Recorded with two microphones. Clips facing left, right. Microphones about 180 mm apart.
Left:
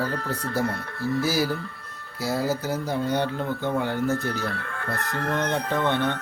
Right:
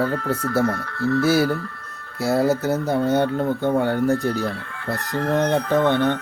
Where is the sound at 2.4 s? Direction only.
25° right (ahead or behind).